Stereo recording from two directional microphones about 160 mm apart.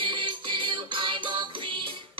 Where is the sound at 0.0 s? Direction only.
30° right (ahead or behind).